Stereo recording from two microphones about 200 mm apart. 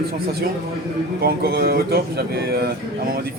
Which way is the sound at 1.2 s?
50° right (ahead or behind).